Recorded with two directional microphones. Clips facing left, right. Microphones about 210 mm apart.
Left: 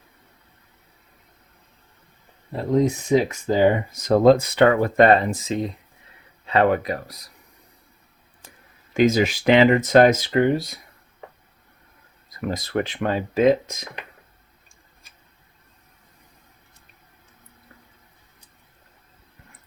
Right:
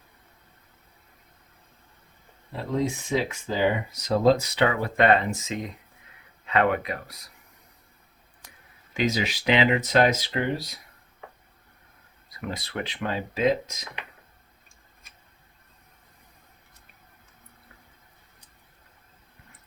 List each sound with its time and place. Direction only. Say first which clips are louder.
3.1 s speech: left 8 dB; 45° left (ahead or behind)
8.9 s speech: left 8 dB; 50° left (ahead or behind)
12.3 s speech: left 8 dB; 40° left (ahead or behind)